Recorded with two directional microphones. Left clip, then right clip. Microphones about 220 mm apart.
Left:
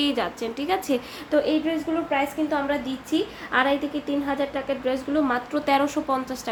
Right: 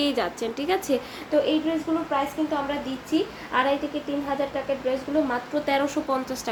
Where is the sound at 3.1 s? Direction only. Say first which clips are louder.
Left 1 dB; 25° left (ahead or behind).